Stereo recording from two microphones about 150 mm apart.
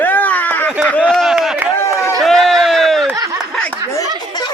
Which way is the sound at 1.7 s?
15° left (ahead or behind).